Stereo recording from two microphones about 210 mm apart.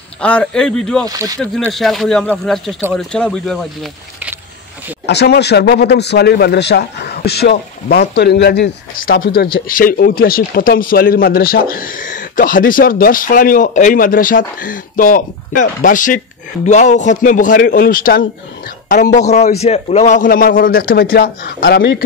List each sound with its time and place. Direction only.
0.2 s speech: 5° left (ahead or behind)
1.0 s speech: 15° right (ahead or behind)
1.7 s speech: centre (ahead or behind)
5.0 s speech: 55° left (ahead or behind)